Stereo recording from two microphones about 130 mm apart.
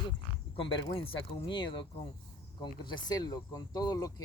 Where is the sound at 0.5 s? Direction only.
45° left (ahead or behind).